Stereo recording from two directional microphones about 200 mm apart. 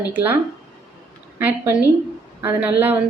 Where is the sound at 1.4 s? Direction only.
10° right (ahead or behind).